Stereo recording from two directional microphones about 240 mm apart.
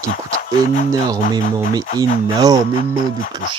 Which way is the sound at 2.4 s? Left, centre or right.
Centre.